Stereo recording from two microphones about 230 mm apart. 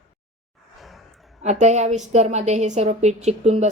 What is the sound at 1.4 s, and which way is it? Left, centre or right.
A woman's voice, right.